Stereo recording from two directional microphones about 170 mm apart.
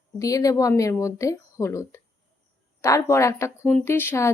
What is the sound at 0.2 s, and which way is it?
Speech, 20° left (ahead or behind).